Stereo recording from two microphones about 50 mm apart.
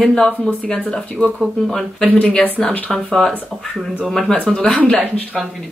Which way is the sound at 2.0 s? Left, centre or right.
Left.